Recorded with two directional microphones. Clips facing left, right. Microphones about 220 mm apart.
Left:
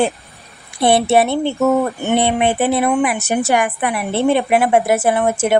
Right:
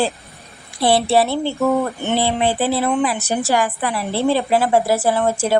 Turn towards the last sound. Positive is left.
turn(degrees=20)  # may be behind; listen again after turning